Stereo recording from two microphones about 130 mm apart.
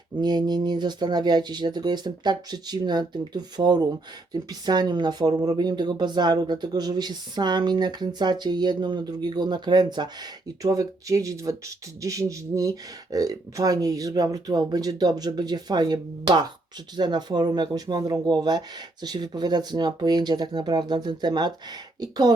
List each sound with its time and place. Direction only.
0.2 s speech: 35° right (ahead or behind)